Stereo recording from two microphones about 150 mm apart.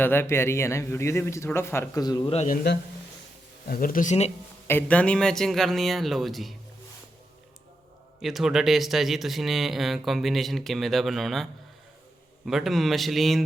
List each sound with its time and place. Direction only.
0.0 s speech: 15° left (ahead or behind)
3.7 s speech: 70° left (ahead or behind); by 4.3 s 50° left (ahead or behind)
4.7 s speech: 10° left (ahead or behind)
8.2 s speech: centre (ahead or behind)
12.5 s speech: centre (ahead or behind)